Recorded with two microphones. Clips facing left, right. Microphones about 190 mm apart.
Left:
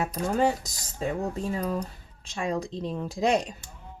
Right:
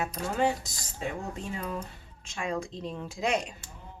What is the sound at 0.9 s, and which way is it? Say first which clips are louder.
Speech: left 6 dB; 40° left (ahead or behind).